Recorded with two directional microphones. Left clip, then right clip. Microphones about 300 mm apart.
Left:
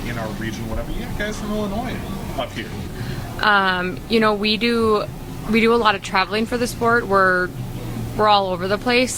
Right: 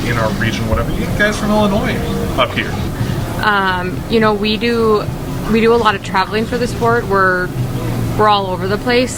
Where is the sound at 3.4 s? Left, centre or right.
Left.